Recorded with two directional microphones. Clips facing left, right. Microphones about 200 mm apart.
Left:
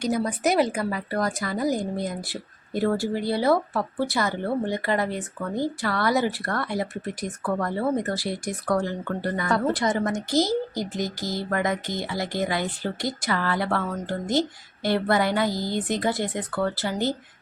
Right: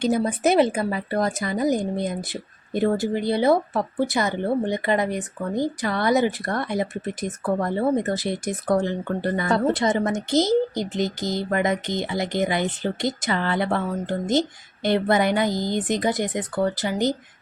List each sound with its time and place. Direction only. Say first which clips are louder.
0.0 s speech: right 3 dB; 25° right (ahead or behind)